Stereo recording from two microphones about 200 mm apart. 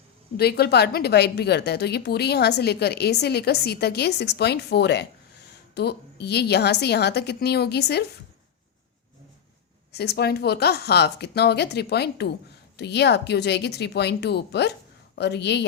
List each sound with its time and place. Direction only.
0.3 s a woman's voice: 55° left (ahead or behind)
9.9 s a woman's voice: 55° left (ahead or behind)